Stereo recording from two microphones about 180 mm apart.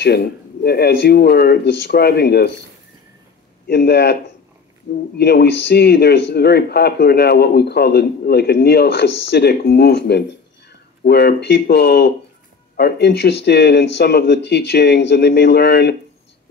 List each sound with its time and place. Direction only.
0.0 s speech: 65° left (ahead or behind)
3.6 s speech: 65° left (ahead or behind)